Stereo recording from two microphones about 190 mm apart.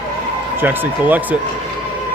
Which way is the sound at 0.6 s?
10° right (ahead or behind).